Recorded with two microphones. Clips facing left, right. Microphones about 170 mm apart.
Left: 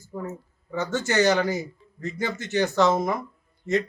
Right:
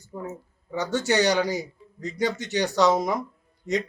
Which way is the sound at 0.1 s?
5° right (ahead or behind).